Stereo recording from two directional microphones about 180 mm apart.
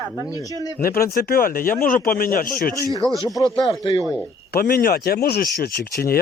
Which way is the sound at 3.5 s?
30° left (ahead or behind).